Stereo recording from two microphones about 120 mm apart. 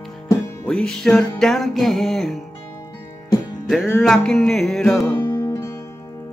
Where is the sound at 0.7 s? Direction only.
5° left (ahead or behind).